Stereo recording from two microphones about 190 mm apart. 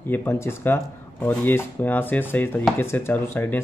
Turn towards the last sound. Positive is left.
turn(degrees=10)  # may be behind; listen again after turning